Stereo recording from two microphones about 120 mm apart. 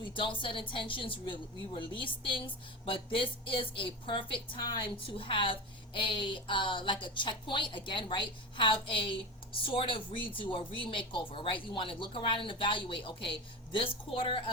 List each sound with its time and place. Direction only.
0.1 s a woman's voice: 45° left (ahead or behind)